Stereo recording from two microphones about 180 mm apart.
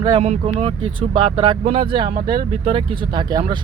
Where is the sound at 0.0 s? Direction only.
25° right (ahead or behind).